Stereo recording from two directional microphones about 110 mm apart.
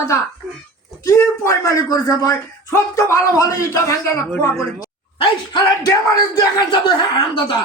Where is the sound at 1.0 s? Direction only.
25° left (ahead or behind).